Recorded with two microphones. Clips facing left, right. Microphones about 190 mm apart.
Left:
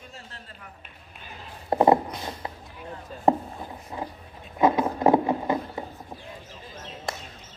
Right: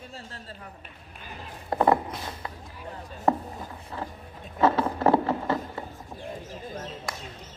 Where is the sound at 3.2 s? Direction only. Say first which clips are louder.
Left 3 dB; 20° left (ahead or behind).